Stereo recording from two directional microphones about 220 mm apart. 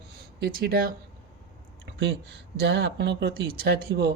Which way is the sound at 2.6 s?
50° right (ahead or behind).